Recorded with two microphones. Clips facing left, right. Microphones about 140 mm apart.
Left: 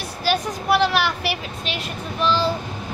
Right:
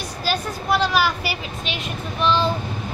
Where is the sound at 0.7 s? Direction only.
70° left (ahead or behind).